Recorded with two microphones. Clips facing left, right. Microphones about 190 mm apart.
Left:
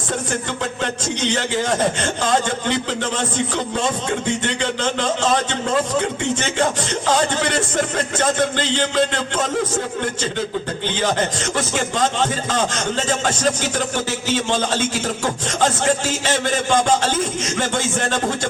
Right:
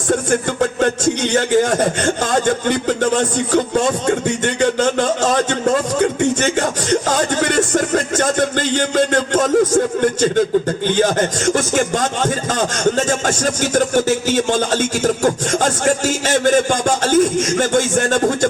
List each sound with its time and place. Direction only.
0.1 s speech: 45° right (ahead or behind)